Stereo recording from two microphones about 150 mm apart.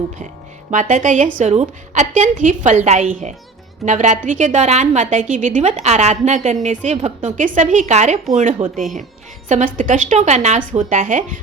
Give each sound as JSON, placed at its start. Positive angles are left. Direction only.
{"t": 0.7, "sound": "a woman's voice", "side_deg": -55}